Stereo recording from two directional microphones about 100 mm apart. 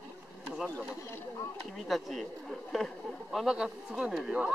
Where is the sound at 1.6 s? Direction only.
Centre (ahead or behind).